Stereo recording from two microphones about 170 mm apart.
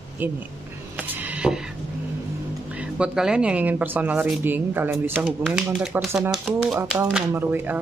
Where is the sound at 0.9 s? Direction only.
10° right (ahead or behind).